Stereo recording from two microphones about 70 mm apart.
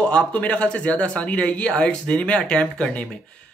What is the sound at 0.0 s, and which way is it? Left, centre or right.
Speech, centre.